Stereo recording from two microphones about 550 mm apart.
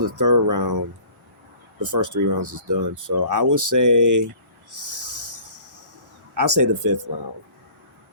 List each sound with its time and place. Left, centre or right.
0.0 s speech: right
1.8 s speech: right
4.7 s a sound: right
6.3 s speech: right